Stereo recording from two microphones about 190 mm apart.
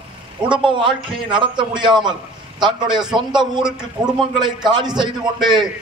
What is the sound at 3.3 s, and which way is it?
Speech, 25° right (ahead or behind).